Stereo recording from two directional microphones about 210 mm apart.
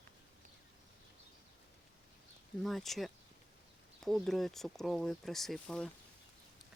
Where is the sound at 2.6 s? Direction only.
Centre (ahead or behind).